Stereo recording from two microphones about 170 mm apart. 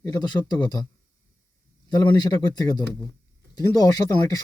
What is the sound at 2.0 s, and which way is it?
Speech, 25° left (ahead or behind).